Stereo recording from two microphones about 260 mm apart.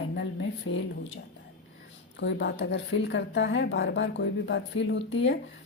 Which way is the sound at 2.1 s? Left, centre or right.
Left.